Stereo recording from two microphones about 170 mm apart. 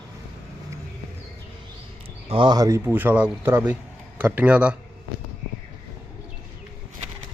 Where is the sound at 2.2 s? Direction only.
30° right (ahead or behind); by 4.7 s 5° right (ahead or behind).